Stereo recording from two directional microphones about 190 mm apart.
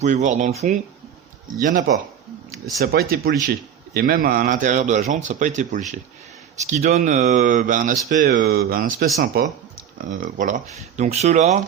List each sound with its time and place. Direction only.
0.0 s speech: 40° right (ahead or behind)
2.8 s speech: 55° right (ahead or behind)